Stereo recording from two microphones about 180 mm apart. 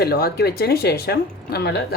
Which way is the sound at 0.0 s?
60° left (ahead or behind).